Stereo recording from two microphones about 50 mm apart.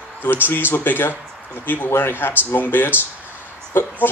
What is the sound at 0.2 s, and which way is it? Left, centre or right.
Speech, left.